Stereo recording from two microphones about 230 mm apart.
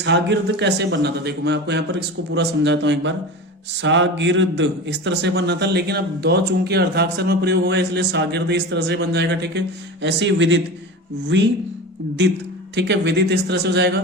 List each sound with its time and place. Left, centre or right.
0.0 s a man's voice: right
12.7 s a man's voice: right